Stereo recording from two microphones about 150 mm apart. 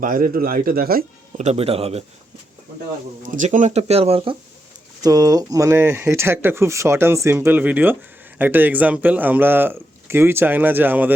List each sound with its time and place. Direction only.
0.0 s speech: 65° right (ahead or behind)
1.4 s speech: 45° right (ahead or behind)
3.2 s speech: 55° right (ahead or behind); by 4.4 s 40° right (ahead or behind)
5.0 s speech: 25° right (ahead or behind)